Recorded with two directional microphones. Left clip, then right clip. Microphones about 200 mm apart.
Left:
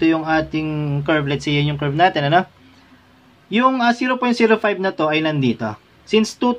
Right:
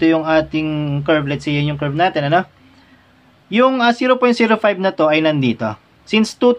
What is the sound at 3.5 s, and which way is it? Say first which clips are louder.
Speech: right 3 dB; 15° right (ahead or behind).